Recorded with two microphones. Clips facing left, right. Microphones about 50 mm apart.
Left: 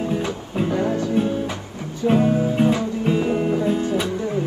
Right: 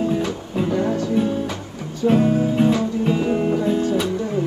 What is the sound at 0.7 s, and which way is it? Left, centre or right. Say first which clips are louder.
Music: right 1 dB; left.